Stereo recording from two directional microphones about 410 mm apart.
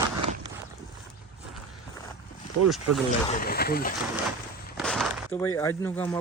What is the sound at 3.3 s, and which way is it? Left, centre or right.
Speech, left.